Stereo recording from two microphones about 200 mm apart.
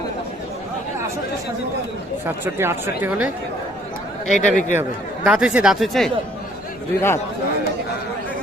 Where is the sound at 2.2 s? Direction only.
10° right (ahead or behind).